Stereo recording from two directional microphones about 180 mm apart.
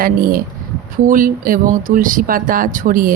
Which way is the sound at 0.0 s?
55° right (ahead or behind).